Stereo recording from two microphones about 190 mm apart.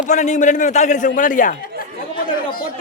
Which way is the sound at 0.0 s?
40° left (ahead or behind).